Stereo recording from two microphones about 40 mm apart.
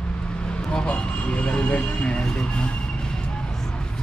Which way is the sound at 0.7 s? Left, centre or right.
Left.